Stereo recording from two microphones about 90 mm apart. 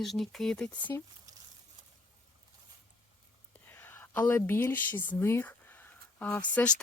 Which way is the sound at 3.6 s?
25° left (ahead or behind).